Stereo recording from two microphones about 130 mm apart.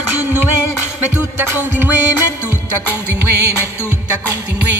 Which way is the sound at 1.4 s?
15° right (ahead or behind).